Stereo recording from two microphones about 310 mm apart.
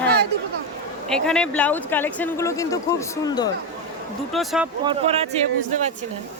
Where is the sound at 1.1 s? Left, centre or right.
Centre.